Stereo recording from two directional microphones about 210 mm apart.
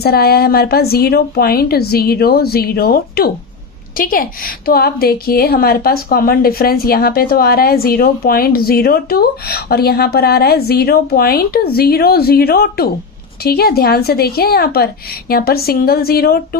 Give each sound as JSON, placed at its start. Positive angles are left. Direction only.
{"t": 0.0, "sound": "a woman's voice", "side_deg": 50}